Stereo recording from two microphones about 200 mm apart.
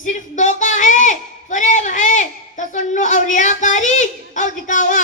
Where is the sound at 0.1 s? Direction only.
35° left (ahead or behind).